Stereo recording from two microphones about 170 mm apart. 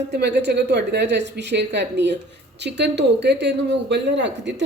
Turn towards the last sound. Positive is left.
turn(degrees=-90)